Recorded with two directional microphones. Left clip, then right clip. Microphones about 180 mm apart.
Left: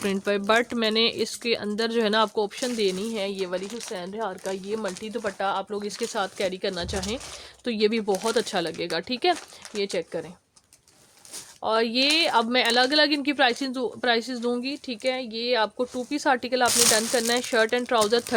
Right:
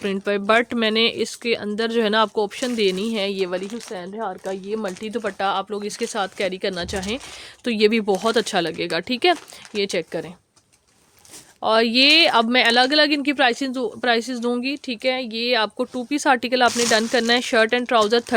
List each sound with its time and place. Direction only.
0.0 s speech: 20° right (ahead or behind); by 3.7 s 65° right (ahead or behind)
3.9 s speech: 40° right (ahead or behind)
5.0 s speech: 70° right (ahead or behind)
11.6 s speech: 60° right (ahead or behind); by 18.3 s 40° right (ahead or behind)